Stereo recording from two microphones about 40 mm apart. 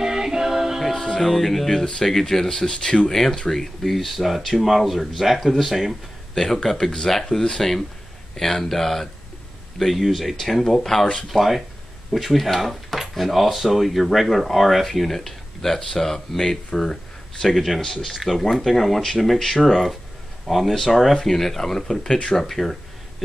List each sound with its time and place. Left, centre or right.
0.0 s music: centre
0.9 s speech: centre
6.3 s speech: centre
11.3 s speech: centre
22.4 s speech: centre